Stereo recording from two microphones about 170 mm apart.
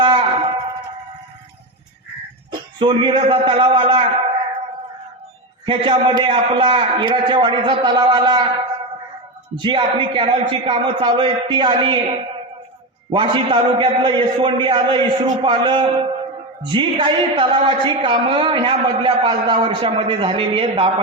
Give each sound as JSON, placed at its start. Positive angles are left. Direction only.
{"t": 0.0, "sound": "a sound", "side_deg": -30}
{"t": 2.5, "sound": "a man's voice", "side_deg": -25}
{"t": 5.6, "sound": "a man's voice", "side_deg": -30}
{"t": 9.6, "sound": "a man's voice", "side_deg": -30}
{"t": 13.1, "sound": "a man's voice", "side_deg": -30}